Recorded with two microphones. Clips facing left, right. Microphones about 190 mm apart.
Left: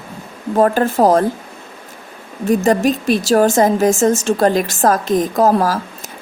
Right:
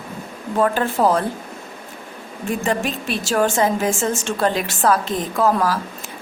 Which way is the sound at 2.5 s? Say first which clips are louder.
Left 8 dB; 40° left (ahead or behind).